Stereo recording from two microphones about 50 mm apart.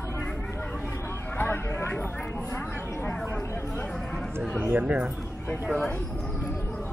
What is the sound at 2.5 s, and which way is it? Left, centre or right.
Speech, left.